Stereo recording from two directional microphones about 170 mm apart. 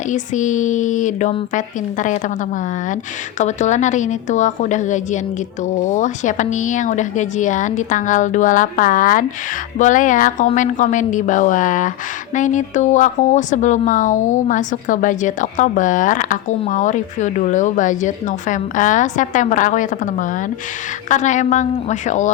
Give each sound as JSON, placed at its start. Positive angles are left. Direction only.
{"t": 0.1, "sound": "a woman's voice", "side_deg": 45}
{"t": 3.3, "sound": "a woman's voice", "side_deg": 45}